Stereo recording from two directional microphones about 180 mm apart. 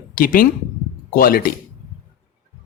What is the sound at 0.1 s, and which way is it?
Speech, 50° left (ahead or behind).